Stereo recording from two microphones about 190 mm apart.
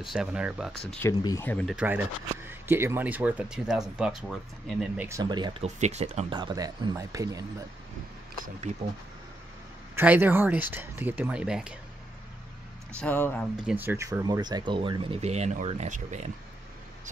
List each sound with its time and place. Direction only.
0.0 s speech: centre (ahead or behind)
0.9 s speech: 15° left (ahead or behind)
1.8 s speech: 10° right (ahead or behind)
5.0 s speech: 20° right (ahead or behind)
9.9 s speech: 10° right (ahead or behind)
13.0 s speech: 10° left (ahead or behind)
13.7 s speech: 10° right (ahead or behind); by 16.3 s 40° right (ahead or behind)